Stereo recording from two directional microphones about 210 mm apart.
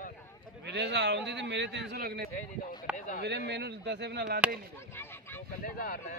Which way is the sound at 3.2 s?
55° right (ahead or behind).